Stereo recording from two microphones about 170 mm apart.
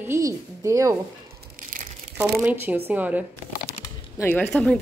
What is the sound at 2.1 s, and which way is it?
Speech, 10° right (ahead or behind).